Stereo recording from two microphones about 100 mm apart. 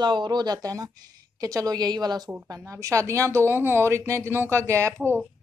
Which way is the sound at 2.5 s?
35° right (ahead or behind).